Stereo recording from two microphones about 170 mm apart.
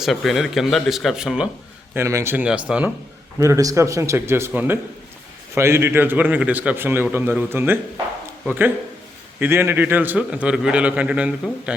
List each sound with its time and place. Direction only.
0.0 s speech: centre (ahead or behind)
1.9 s a man's voice: 15° right (ahead or behind)
3.4 s a man's voice: 20° right (ahead or behind)